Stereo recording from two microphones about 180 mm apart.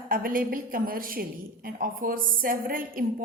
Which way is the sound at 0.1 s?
50° right (ahead or behind).